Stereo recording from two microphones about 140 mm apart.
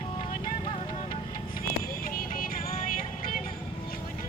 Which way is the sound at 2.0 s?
90° left.